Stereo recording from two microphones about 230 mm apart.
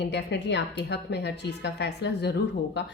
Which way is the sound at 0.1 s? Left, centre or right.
Left.